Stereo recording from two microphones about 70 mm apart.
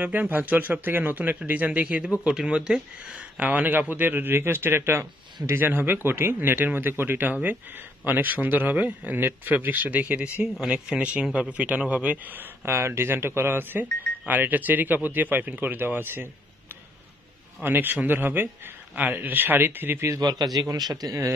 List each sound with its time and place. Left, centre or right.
0.0 s a man's voice: right
10.4 s a man's voice: centre; by 16.3 s right
17.6 s a man's voice: right
20.2 s a man's voice: right
20.7 s speech: right